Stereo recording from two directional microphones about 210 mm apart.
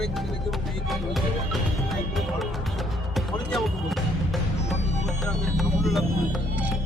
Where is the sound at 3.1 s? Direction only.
Centre (ahead or behind).